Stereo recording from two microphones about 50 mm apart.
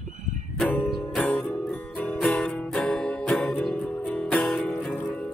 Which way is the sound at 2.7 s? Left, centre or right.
Centre.